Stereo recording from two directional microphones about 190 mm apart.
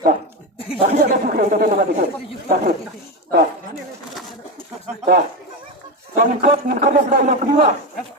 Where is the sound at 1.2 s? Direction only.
45° right (ahead or behind).